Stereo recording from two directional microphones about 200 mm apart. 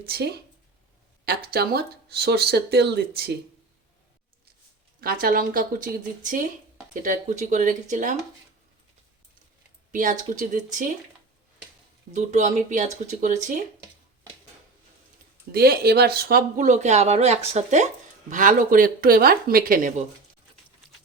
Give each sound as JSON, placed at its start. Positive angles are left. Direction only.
{"t": 0.0, "sound": "speech", "side_deg": -50}
{"t": 4.9, "sound": "speech", "side_deg": -45}
{"t": 9.9, "sound": "speech", "side_deg": -40}
{"t": 12.1, "sound": "speech", "side_deg": -35}
{"t": 15.5, "sound": "speech", "side_deg": -50}